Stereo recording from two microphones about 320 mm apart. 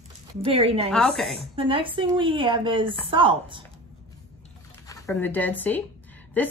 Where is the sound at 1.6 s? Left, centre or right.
Centre.